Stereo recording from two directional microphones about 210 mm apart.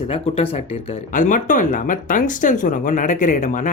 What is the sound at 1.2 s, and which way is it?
Speech, 40° left (ahead or behind).